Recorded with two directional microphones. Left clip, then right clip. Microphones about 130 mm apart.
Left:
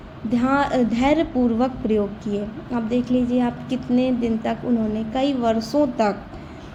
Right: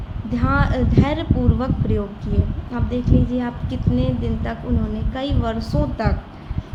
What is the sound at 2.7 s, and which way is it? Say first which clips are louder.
A woman's voice: left 1 dB; 45° left (ahead or behind).